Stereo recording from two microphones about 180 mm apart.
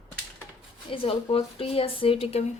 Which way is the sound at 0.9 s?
30° left (ahead or behind).